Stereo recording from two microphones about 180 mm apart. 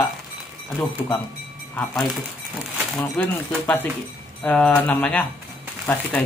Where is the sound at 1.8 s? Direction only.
Centre (ahead or behind).